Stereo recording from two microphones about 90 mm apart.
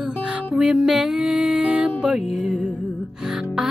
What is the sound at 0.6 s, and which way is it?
Music, 10° right (ahead or behind).